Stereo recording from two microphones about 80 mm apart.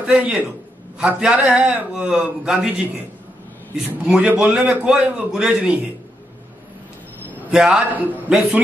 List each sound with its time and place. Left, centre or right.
0.0 s a man's voice: centre
4.0 s a man's voice: centre
7.5 s a man's voice: centre